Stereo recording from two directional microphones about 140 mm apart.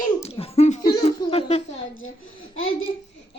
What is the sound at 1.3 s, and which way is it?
Speech, 45° left (ahead or behind).